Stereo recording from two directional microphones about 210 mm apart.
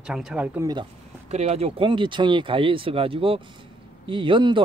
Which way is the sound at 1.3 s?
30° right (ahead or behind).